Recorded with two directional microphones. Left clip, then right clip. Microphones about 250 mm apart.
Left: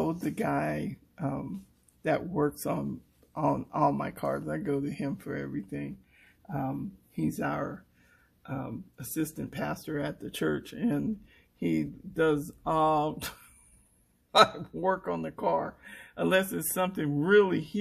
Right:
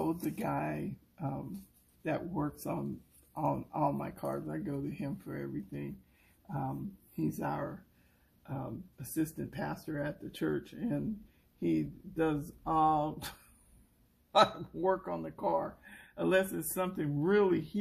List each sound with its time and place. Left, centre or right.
0.4 s speech: left
7.2 s speech: left
14.3 s speech: left